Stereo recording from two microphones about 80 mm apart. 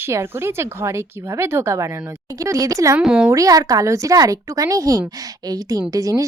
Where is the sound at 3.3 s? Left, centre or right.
Right.